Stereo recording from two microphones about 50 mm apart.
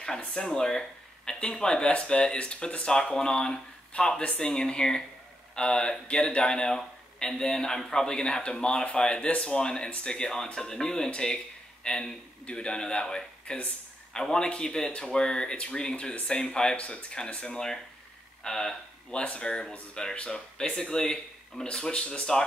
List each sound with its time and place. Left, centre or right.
0.3 s speech: centre
18.4 s speech: centre